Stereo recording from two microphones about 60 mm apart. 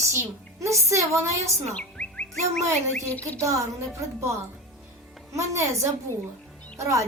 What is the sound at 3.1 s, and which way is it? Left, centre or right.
Chirp, left.